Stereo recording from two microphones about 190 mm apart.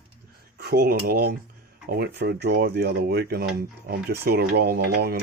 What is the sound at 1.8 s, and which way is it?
Speech, 55° right (ahead or behind).